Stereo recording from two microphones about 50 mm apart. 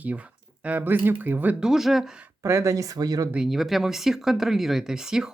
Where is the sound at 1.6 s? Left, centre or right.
Centre.